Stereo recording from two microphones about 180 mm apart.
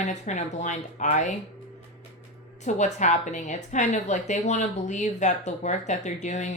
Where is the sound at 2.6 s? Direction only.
40° left (ahead or behind).